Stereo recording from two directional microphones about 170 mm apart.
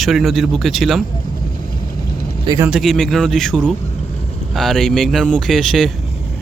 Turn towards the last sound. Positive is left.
turn(degrees=0)  # may be behind; listen again after turning